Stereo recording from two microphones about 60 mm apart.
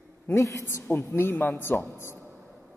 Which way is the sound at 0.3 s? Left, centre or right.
Left.